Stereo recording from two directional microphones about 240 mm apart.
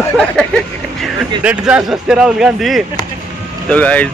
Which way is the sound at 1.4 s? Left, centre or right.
Centre.